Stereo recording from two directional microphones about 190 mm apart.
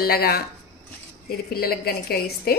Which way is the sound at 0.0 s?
55° left (ahead or behind).